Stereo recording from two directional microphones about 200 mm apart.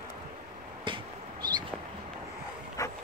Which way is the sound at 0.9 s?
25° right (ahead or behind).